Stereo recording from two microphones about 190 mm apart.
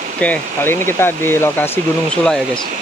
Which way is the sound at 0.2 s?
10° left (ahead or behind).